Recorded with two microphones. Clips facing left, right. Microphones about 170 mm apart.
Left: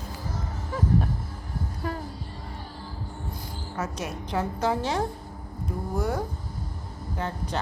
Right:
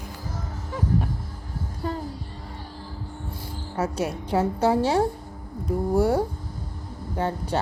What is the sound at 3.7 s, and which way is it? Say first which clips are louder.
A woman's voice: right 6 dB; 30° right (ahead or behind).